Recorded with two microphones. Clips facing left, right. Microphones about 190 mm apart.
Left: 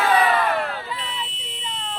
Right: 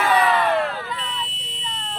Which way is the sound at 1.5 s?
Centre (ahead or behind).